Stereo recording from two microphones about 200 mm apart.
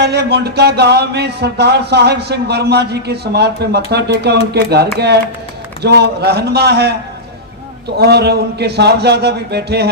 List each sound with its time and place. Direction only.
0.0 s speech: 55° right (ahead or behind)